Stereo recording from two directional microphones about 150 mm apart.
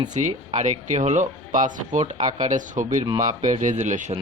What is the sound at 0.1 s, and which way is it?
Speech, 55° right (ahead or behind).